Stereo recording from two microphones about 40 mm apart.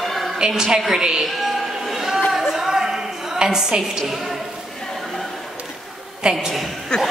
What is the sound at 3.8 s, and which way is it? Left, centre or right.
Speech, centre.